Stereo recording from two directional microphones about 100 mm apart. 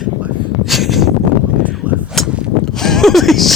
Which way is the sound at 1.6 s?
15° right (ahead or behind).